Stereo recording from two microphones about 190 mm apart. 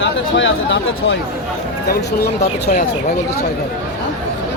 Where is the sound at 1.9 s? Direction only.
60° left (ahead or behind).